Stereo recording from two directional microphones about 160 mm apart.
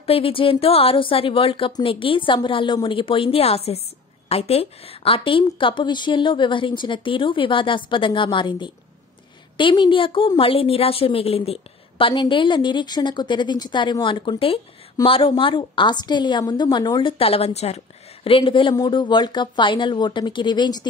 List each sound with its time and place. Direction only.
0.0 s a woman's voice: 35° left (ahead or behind)